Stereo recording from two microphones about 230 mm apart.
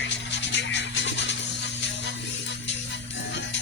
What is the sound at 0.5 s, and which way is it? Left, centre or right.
Music, left.